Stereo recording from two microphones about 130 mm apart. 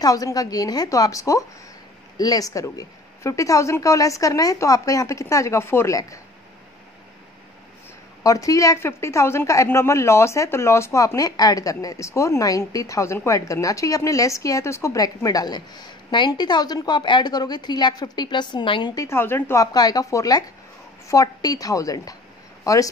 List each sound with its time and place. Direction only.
0.0 s a woman's voice: 25° left (ahead or behind)
8.2 s a woman's voice: 25° left (ahead or behind)
19.0 s a woman's voice: 15° left (ahead or behind)